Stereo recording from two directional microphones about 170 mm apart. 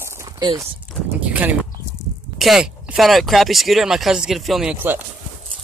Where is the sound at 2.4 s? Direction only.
Centre (ahead or behind).